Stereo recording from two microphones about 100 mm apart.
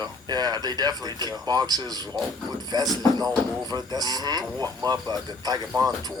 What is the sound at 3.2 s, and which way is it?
Speech, 40° right (ahead or behind).